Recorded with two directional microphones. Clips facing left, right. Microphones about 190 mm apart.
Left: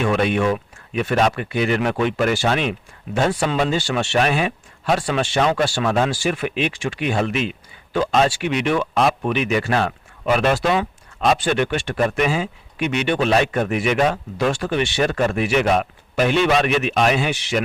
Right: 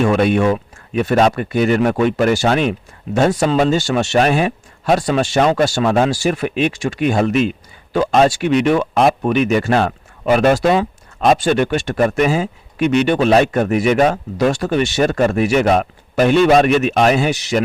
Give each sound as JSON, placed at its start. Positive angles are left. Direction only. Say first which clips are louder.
{"t": 0.0, "sound": "speech", "louder": "right 5 dB", "side_deg": -40}